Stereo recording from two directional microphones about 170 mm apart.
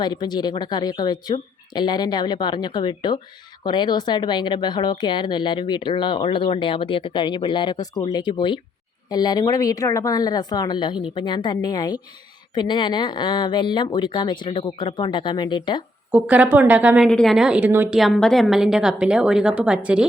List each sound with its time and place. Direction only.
0.0 s speech: 25° left (ahead or behind)
16.1 s a woman's voice: 10° right (ahead or behind)
17.1 s a woman's voice: centre (ahead or behind)
17.9 s a woman's voice: centre (ahead or behind)